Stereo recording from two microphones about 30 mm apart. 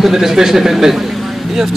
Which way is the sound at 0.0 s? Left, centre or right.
Centre.